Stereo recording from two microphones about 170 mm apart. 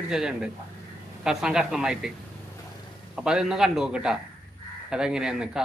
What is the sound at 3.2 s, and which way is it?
Speech, 5° right (ahead or behind).